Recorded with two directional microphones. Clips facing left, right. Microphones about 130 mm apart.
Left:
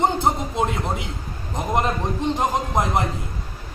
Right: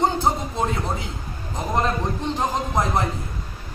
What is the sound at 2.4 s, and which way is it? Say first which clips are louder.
Speech: right 1 dB; 15° left (ahead or behind).